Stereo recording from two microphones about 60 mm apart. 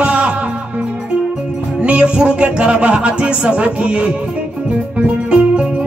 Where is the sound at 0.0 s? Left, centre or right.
Centre.